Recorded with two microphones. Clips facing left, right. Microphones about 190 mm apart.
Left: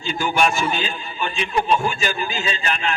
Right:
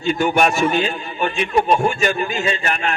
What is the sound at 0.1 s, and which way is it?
A man's voice, 60° right (ahead or behind).